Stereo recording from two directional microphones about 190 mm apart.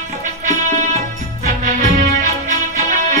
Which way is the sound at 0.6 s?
40° right (ahead or behind).